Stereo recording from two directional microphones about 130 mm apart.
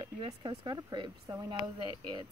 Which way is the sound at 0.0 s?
40° right (ahead or behind).